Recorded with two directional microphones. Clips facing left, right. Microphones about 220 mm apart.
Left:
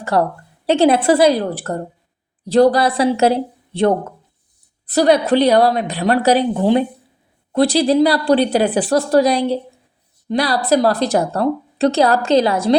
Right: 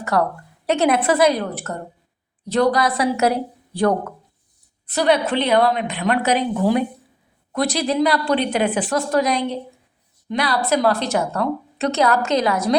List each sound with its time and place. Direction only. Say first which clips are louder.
0.0 s a woman's voice: left 3 dB; 30° left (ahead or behind)
4.9 s a woman's voice: left 5 dB; 35° left (ahead or behind)